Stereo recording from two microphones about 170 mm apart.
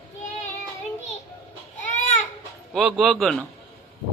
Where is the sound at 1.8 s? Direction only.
45° left (ahead or behind).